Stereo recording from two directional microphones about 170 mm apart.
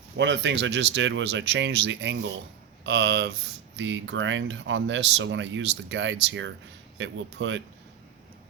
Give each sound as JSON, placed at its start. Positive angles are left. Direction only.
{"t": 0.2, "sound": "speech", "side_deg": -90}